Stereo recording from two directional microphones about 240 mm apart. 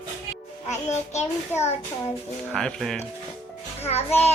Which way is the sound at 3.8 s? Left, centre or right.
Left.